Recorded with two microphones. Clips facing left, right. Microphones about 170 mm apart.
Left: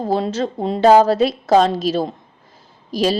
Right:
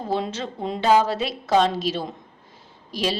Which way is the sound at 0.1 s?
35° left (ahead or behind).